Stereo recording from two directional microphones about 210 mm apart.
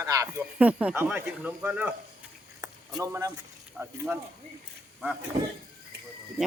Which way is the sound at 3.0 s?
15° right (ahead or behind).